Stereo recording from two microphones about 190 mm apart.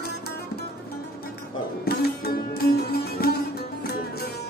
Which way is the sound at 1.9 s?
55° left (ahead or behind).